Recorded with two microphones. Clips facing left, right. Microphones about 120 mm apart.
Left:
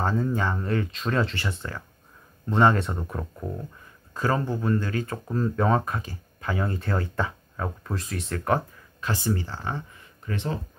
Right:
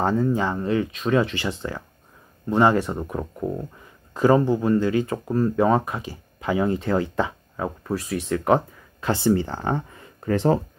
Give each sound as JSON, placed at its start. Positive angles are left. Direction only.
{"t": 0.0, "sound": "speech", "side_deg": -10}
{"t": 2.4, "sound": "speech", "side_deg": -5}
{"t": 9.0, "sound": "speech", "side_deg": -30}